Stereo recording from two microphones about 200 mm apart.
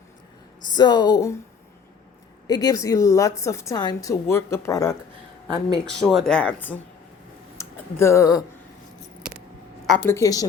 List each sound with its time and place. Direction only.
0.7 s speech: 20° left (ahead or behind)
2.5 s a woman's voice: 20° left (ahead or behind)
6.0 s speech: centre (ahead or behind)
9.9 s a woman's voice: 10° left (ahead or behind)